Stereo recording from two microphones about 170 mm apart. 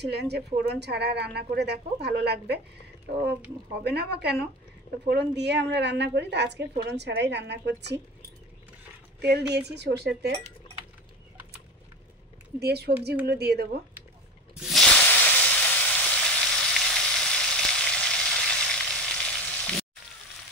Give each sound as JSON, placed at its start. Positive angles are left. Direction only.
{"t": 0.0, "sound": "a woman's voice", "side_deg": -75}
{"t": 9.2, "sound": "a woman's voice", "side_deg": -75}
{"t": 12.5, "sound": "a woman's voice", "side_deg": -70}
{"t": 14.6, "sound": "hiss", "side_deg": 0}